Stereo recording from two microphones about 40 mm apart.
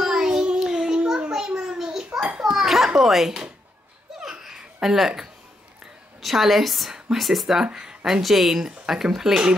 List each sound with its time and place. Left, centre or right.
0.0 s a sound: centre
2.2 s children playing: right
2.5 s children playing: centre
3.0 s speech: centre
4.2 s laughter: centre
4.9 s a woman's voice: centre
7.6 s speech: right